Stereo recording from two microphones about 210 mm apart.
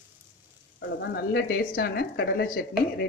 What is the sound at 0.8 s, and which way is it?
Speech, 55° left (ahead or behind).